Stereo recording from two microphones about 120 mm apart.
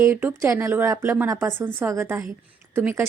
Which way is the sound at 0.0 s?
15° right (ahead or behind).